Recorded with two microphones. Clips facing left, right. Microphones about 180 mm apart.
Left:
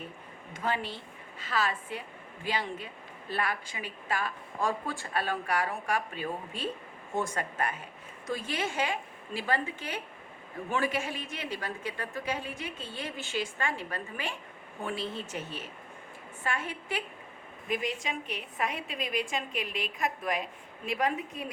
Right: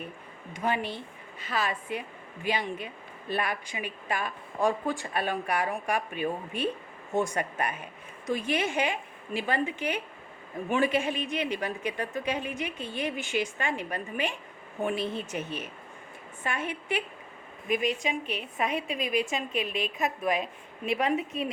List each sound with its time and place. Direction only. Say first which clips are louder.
0.5 s a woman's voice: right 3 dB; 15° right (ahead or behind)